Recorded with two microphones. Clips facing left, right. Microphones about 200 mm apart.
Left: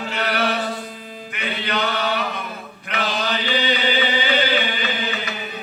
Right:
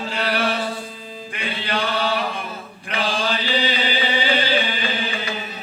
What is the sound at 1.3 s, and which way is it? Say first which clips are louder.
Chant: left 1 dB; 30° right (ahead or behind).